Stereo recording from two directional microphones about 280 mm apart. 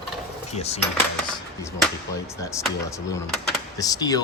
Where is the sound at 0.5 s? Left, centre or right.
Left.